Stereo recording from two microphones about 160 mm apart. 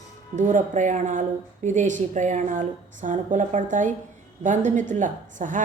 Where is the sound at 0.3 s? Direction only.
50° right (ahead or behind).